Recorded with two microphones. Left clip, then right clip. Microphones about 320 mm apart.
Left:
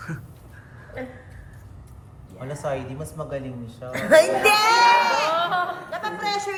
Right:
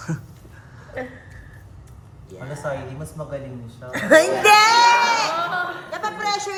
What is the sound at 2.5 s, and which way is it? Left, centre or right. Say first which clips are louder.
Speech: even; left.